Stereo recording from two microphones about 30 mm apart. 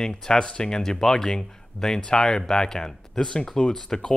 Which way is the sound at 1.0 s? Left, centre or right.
Centre.